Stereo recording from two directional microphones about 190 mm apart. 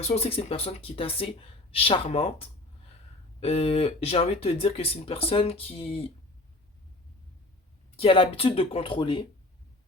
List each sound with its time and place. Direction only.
0.0 s speech: 30° left (ahead or behind)
3.4 s speech: 30° left (ahead or behind)
7.9 s speech: 30° left (ahead or behind)